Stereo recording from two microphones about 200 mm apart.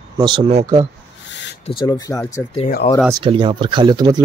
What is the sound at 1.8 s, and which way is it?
Speech, 20° left (ahead or behind).